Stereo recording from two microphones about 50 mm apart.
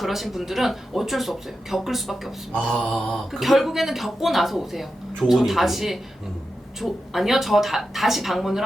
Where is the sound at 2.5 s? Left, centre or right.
Centre.